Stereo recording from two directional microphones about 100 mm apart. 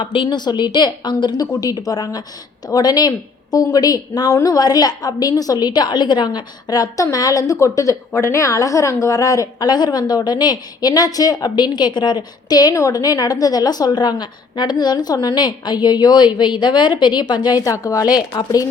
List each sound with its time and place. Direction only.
0.0 s a woman's voice: 55° left (ahead or behind)